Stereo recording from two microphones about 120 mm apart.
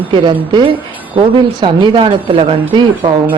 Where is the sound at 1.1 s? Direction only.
45° right (ahead or behind).